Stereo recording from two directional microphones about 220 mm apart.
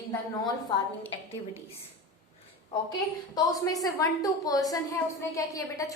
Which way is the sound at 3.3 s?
15° left (ahead or behind).